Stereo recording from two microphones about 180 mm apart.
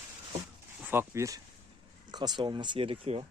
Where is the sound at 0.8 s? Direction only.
10° right (ahead or behind); by 3.3 s 30° right (ahead or behind).